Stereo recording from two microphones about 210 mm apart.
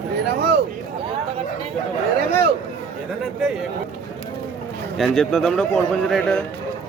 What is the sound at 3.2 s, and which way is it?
Speech, centre (ahead or behind).